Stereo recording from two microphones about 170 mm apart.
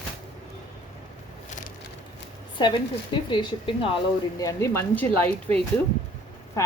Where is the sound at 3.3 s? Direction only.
30° left (ahead or behind); by 5.5 s 10° left (ahead or behind).